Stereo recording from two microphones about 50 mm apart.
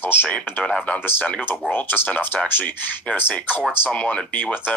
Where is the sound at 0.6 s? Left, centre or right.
Left.